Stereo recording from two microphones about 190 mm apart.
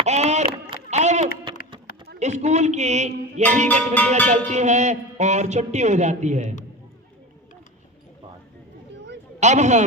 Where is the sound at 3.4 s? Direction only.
35° right (ahead or behind).